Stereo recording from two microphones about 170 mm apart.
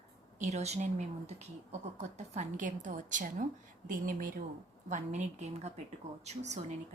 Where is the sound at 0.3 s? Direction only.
45° right (ahead or behind).